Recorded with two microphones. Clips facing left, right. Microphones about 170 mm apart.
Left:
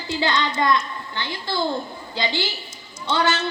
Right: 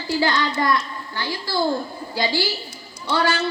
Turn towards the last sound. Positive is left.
turn(degrees=25)  # may be behind; listen again after turning